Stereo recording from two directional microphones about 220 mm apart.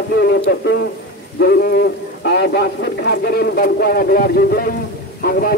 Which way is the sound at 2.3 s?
50° left (ahead or behind).